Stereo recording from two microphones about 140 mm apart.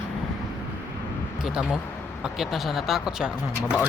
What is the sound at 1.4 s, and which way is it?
Speech, 5° right (ahead or behind).